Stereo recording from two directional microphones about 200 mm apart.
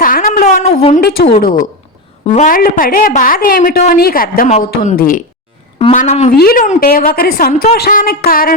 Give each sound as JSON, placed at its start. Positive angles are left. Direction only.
{"t": 0.0, "sound": "a sound", "side_deg": 45}
{"t": 1.4, "sound": "a woman's voice", "side_deg": 45}
{"t": 4.5, "sound": "speech", "side_deg": 35}
{"t": 4.9, "sound": "a woman's voice", "side_deg": 45}
{"t": 6.3, "sound": "a woman's voice", "side_deg": 50}